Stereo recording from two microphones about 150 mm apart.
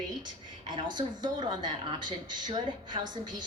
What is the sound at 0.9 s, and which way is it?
A woman's voice, 30° right (ahead or behind).